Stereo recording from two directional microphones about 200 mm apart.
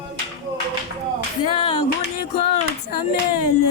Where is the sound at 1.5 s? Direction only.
25° left (ahead or behind).